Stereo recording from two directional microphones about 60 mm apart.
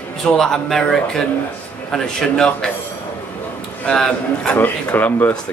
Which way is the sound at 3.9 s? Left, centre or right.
Centre.